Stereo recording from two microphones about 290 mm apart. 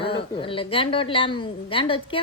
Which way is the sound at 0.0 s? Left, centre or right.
Centre.